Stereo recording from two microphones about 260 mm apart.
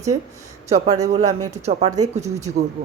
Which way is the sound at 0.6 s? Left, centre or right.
Right.